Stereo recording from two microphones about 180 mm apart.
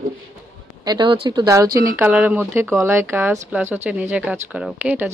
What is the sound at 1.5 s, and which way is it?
Speech, 15° right (ahead or behind).